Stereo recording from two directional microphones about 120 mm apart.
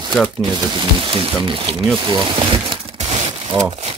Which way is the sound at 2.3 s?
45° right (ahead or behind).